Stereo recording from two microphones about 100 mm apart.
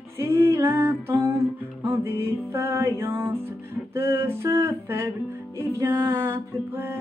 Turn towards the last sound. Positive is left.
turn(degrees=-25)  # may be behind; listen again after turning